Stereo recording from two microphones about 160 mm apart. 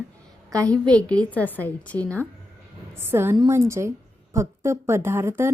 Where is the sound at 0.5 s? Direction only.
20° right (ahead or behind).